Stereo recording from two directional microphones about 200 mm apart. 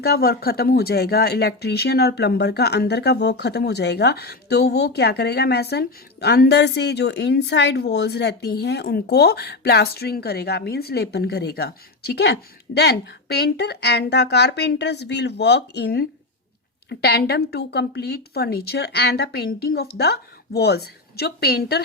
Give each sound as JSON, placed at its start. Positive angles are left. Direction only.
{"t": 0.0, "sound": "a woman's voice", "side_deg": 50}